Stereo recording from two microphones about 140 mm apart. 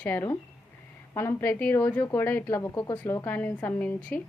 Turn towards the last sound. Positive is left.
turn(degrees=10)  # may be behind; listen again after turning